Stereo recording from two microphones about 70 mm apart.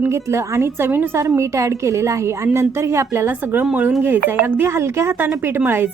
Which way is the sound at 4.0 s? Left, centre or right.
Right.